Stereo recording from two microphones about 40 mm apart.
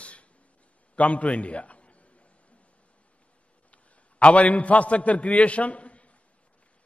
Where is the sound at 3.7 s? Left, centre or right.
Left.